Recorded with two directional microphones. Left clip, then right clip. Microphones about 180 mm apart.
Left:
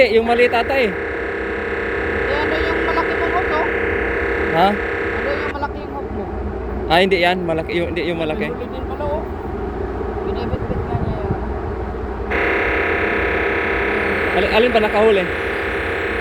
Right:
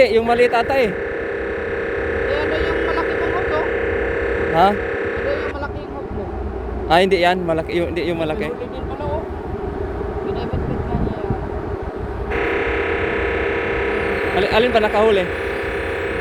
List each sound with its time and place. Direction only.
0.0 s a man's voice: 15° right (ahead or behind)
1.7 s a sound: 55° left (ahead or behind)
6.8 s a man's voice: 15° right (ahead or behind)
12.3 s music: 35° left (ahead or behind)
14.5 s a man's voice: 10° right (ahead or behind)
15.2 s hum: 40° left (ahead or behind)